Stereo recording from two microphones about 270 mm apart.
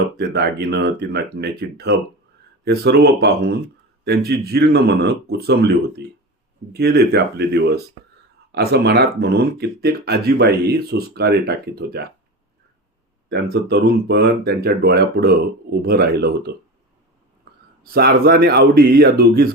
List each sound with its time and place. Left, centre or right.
0.2 s speech: right
13.2 s speech: right
17.5 s whispering: right
17.8 s speech: right